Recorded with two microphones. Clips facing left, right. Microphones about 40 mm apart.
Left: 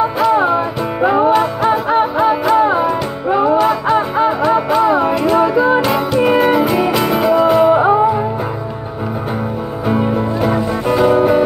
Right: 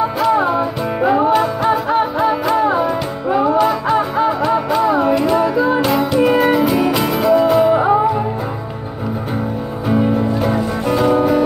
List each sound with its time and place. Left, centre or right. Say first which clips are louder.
0.2 s music: left 1 dB; centre
10.4 s music: left 2 dB; centre